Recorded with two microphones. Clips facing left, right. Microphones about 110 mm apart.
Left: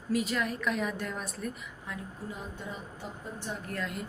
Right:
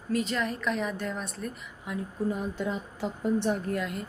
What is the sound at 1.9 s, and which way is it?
Speech, 15° right (ahead or behind).